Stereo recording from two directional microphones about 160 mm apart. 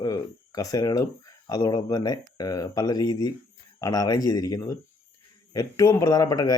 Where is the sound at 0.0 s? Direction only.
20° left (ahead or behind).